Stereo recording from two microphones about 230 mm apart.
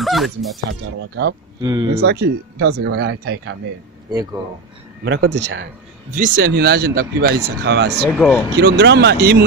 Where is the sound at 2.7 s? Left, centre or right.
Right.